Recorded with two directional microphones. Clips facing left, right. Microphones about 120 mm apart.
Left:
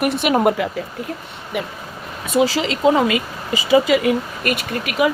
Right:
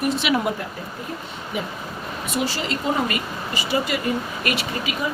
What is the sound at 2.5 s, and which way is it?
A woman's voice, 90° left.